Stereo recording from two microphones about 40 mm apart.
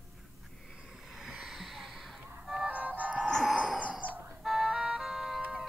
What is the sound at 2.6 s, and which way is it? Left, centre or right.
Music, right.